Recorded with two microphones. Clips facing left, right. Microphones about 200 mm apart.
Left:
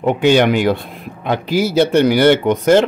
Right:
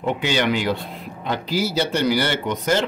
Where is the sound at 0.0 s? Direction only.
50° left (ahead or behind).